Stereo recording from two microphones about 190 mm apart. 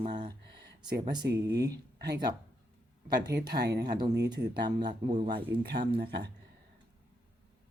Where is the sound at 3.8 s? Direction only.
20° right (ahead or behind).